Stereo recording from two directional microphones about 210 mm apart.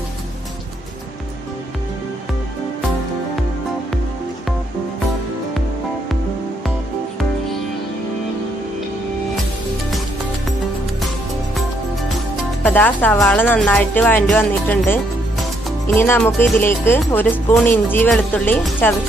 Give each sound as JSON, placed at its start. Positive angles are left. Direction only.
{"t": 12.6, "sound": "speech", "side_deg": 10}